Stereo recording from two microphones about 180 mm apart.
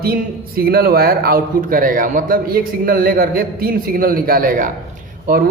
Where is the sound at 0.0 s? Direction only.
55° right (ahead or behind).